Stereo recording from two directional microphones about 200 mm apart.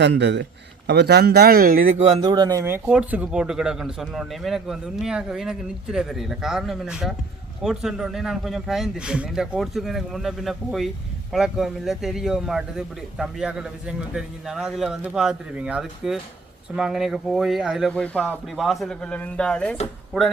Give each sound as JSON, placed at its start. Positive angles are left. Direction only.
{"t": 0.0, "sound": "a man's voice", "side_deg": -60}
{"t": 2.2, "sound": "a man's voice", "side_deg": -20}